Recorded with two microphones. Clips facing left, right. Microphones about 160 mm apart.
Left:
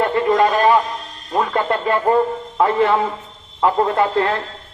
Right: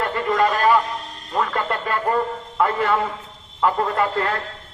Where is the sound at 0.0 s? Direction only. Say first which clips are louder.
Left 5 dB; 25° left (ahead or behind).